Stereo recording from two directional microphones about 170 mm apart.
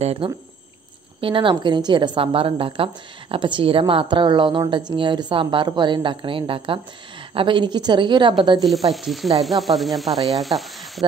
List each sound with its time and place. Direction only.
0.0 s a woman's voice: 35° right (ahead or behind)
8.9 s sizzle: centre (ahead or behind)